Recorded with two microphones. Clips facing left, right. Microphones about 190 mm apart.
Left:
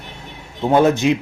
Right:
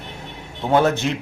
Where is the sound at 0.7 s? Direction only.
15° left (ahead or behind).